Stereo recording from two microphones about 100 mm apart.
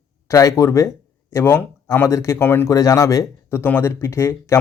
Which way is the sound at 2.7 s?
35° left (ahead or behind).